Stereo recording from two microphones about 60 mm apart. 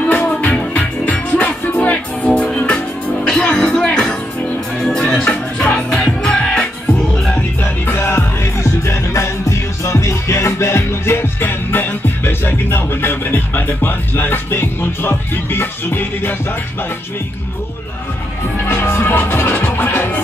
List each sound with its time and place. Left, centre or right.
0.1 s music: left; by 4.1 s centre
5.2 s music: left
7.6 s music: left
8.8 s music: left
18.8 s music: left